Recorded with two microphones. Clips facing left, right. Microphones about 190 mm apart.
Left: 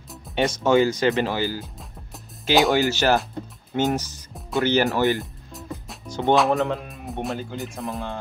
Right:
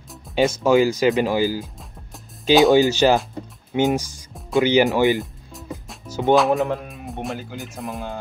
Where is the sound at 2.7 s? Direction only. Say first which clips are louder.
Right 4 dB; 15° right (ahead or behind).